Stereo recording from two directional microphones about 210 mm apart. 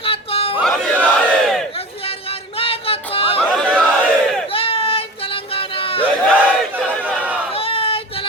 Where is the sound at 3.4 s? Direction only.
5° left (ahead or behind).